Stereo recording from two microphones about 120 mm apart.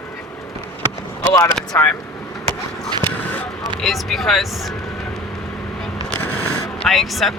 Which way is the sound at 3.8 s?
Centre (ahead or behind).